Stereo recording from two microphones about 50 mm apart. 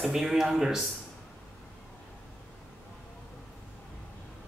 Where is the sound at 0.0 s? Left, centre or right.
Centre.